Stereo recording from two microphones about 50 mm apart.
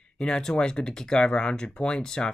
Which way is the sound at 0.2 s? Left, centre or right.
Centre.